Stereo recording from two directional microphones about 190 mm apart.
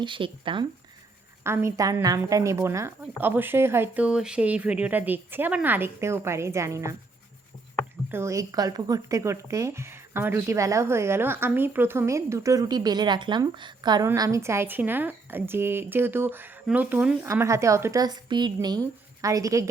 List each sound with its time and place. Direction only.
0.0 s speech: 25° right (ahead or behind)
1.5 s speech: 15° right (ahead or behind)
8.1 s speech: 15° right (ahead or behind)